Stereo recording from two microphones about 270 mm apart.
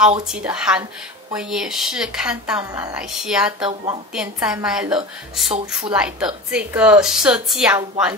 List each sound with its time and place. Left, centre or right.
0.3 s a woman's voice: centre
3.6 s speech: centre
4.1 s a woman's voice: centre